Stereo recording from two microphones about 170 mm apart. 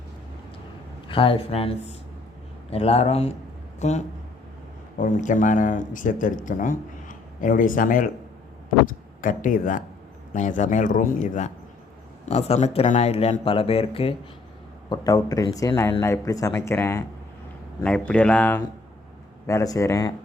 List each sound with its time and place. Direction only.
1.0 s speech: 30° left (ahead or behind)
14.8 s speech: 20° left (ahead or behind)
19.5 s a man's voice: 20° left (ahead or behind)